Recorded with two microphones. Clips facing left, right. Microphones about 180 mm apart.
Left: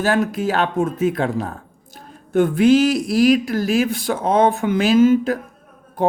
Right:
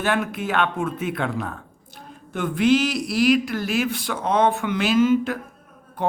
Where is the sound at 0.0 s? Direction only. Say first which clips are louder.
Left 5 dB; 40° left (ahead or behind).